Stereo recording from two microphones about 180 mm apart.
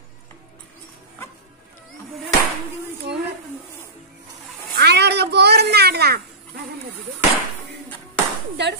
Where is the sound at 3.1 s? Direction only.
70° right (ahead or behind).